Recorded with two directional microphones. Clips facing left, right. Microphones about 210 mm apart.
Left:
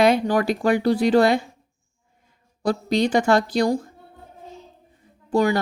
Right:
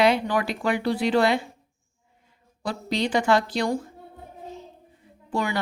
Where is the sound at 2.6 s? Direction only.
45° left (ahead or behind).